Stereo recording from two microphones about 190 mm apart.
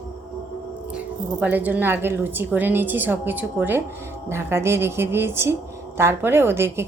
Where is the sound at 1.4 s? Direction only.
10° right (ahead or behind).